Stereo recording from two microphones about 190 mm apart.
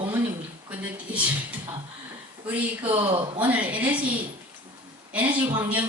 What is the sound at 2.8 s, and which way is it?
Speech, 30° right (ahead or behind).